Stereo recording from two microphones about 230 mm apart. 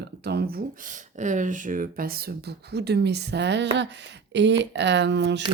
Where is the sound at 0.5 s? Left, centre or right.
Right.